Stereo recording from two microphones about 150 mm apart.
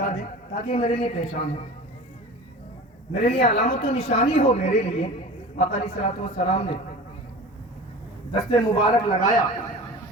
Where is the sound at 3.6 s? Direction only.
40° left (ahead or behind).